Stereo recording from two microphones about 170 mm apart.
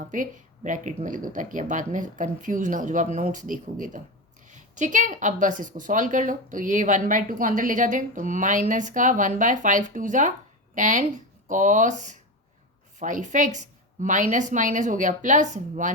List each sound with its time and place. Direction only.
0.0 s a woman's voice: 50° right (ahead or behind)